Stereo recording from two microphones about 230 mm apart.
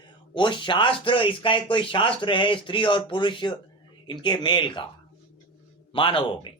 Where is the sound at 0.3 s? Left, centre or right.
Left.